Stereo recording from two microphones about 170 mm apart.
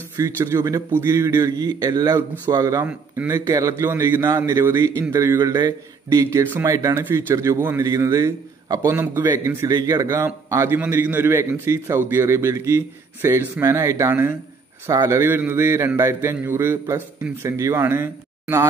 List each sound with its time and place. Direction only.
0.2 s a man's voice: 15° right (ahead or behind)